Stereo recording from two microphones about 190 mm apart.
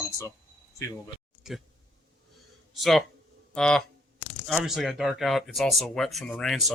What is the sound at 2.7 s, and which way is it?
Speech, centre (ahead or behind).